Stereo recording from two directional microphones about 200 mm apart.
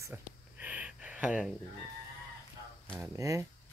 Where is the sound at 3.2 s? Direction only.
15° right (ahead or behind).